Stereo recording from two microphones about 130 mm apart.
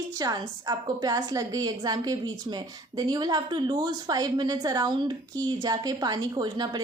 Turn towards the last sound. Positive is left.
turn(degrees=-30)  # may be behind; listen again after turning